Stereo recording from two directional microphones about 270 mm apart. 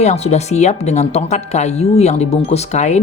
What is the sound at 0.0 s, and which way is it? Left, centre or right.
Speech, left.